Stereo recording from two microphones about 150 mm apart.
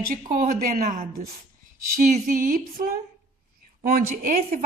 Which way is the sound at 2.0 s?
60° right (ahead or behind).